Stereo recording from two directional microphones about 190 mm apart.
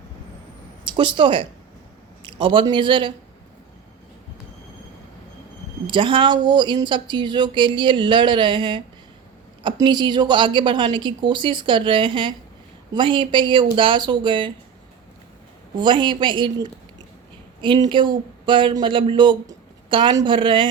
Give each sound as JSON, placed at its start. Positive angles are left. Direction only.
{"t": 0.9, "sound": "a man's voice", "side_deg": -25}
{"t": 5.9, "sound": "a man's voice", "side_deg": -25}
{"t": 15.8, "sound": "a man's voice", "side_deg": -25}